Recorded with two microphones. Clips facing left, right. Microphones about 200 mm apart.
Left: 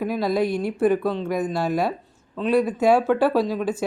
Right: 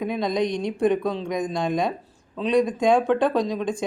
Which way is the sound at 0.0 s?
5° left (ahead or behind).